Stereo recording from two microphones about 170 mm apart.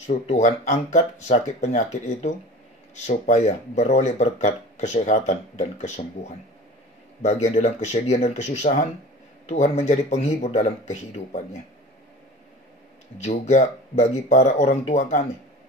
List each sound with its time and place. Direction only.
0.0 s speech: 45° left (ahead or behind)
7.4 s speech: 40° left (ahead or behind)
13.2 s speech: 45° left (ahead or behind)